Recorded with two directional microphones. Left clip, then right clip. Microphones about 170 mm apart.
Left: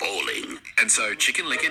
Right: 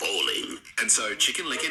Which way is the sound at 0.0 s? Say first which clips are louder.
Even; 20° left (ahead or behind).